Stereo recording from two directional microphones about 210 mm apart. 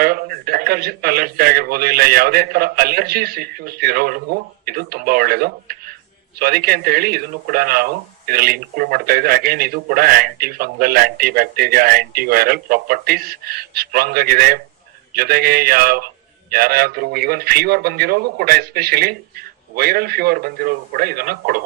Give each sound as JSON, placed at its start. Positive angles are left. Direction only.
{"t": 0.0, "sound": "speech", "side_deg": -45}